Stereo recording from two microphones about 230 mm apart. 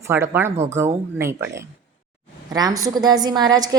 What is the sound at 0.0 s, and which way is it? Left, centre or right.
A woman's voice, centre.